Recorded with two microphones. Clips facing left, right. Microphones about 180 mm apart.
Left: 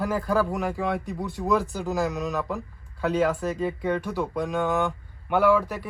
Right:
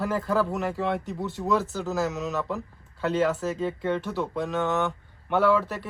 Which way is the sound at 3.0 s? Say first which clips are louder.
Left 1 dB; centre (ahead or behind).